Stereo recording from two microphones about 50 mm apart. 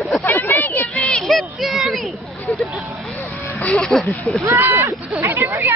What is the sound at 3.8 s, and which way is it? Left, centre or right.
Speech, centre.